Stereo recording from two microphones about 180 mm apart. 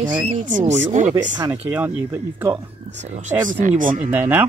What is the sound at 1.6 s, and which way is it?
Speech, 10° right (ahead or behind).